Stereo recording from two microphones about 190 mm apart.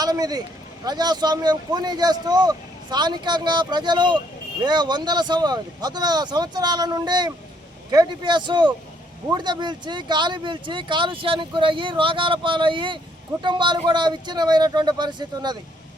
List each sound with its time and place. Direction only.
0.0 s speech: 20° right (ahead or behind)